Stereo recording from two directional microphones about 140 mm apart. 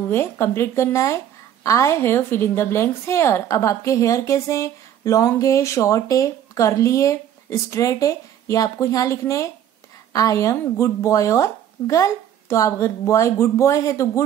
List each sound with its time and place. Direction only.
0.1 s a woman's voice: 15° left (ahead or behind)